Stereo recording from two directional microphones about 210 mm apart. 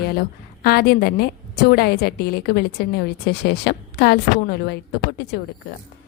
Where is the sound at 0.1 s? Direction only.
45° left (ahead or behind).